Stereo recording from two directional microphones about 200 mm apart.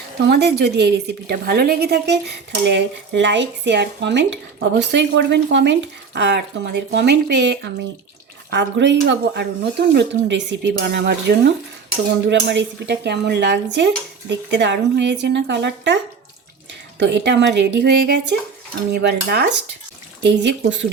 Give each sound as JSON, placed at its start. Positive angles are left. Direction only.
{"t": 0.3, "sound": "a woman's voice", "side_deg": -55}
{"t": 17.0, "sound": "a woman's voice", "side_deg": -60}